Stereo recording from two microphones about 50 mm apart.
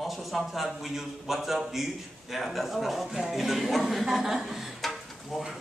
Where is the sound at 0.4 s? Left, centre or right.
Centre.